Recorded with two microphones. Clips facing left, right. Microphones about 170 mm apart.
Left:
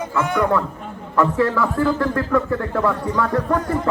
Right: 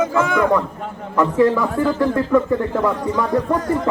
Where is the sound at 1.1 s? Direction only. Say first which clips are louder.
Right 2 dB; 15° right (ahead or behind).